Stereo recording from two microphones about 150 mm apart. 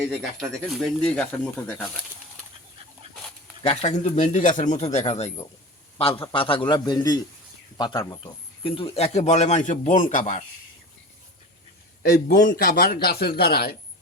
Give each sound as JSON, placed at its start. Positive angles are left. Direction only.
{"t": 0.2, "sound": "speech", "side_deg": 0}
{"t": 3.7, "sound": "speech", "side_deg": 45}
{"t": 6.0, "sound": "a man's voice", "side_deg": 35}
{"t": 12.0, "sound": "a man's voice", "side_deg": 90}